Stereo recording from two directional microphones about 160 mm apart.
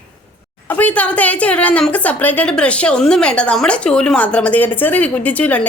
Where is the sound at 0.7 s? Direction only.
10° left (ahead or behind).